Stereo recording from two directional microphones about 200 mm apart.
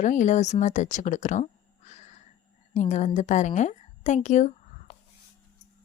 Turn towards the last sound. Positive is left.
turn(degrees=35)  # may be behind; listen again after turning